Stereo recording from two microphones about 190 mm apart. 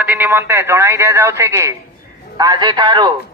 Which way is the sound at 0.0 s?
10° right (ahead or behind).